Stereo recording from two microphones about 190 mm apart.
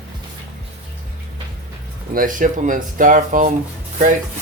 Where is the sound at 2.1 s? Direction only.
45° right (ahead or behind).